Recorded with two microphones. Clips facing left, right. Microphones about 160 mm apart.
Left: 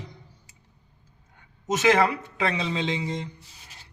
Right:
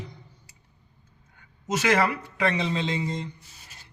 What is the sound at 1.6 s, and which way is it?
A man's voice, 20° left (ahead or behind).